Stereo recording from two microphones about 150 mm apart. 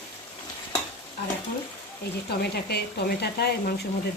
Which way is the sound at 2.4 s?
90° left.